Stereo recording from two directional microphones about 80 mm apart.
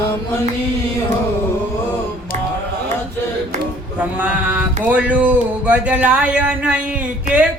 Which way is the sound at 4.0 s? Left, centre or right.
Centre.